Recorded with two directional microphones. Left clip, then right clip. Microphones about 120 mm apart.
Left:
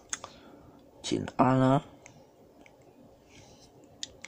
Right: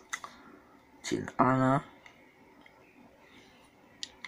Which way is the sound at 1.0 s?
20° left (ahead or behind).